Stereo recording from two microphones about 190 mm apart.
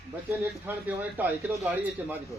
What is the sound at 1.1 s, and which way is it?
Speech, 10° right (ahead or behind).